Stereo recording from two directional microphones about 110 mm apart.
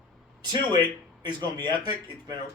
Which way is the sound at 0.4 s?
40° right (ahead or behind).